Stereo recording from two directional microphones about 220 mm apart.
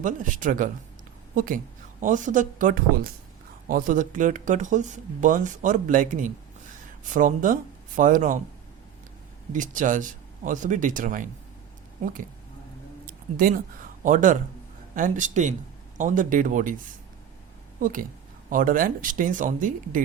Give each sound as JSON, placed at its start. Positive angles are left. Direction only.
{"t": 0.0, "sound": "speech", "side_deg": -35}
{"t": 9.5, "sound": "speech", "side_deg": -35}
{"t": 13.1, "sound": "a sound", "side_deg": -40}
{"t": 14.0, "sound": "speech", "side_deg": -35}
{"t": 17.7, "sound": "speech", "side_deg": -40}